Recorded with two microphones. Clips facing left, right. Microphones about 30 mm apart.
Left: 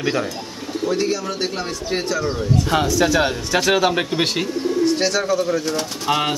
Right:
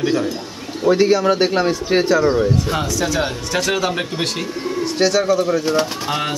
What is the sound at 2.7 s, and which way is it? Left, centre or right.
A man's voice, centre.